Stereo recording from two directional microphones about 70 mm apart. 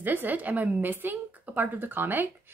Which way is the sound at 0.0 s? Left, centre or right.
Right.